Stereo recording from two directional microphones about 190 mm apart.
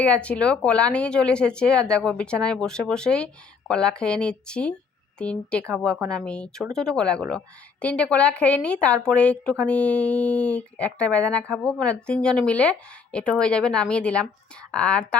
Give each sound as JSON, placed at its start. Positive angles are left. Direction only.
{"t": 0.0, "sound": "a woman's voice", "side_deg": 5}